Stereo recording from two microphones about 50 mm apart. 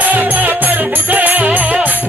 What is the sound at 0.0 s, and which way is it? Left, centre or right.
Music, right.